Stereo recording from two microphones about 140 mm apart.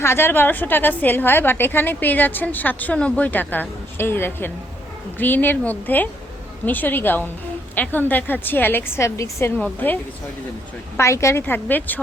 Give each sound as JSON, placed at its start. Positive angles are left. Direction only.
{"t": 0.0, "sound": "a woman's voice", "side_deg": 15}
{"t": 10.9, "sound": "a woman's voice", "side_deg": 20}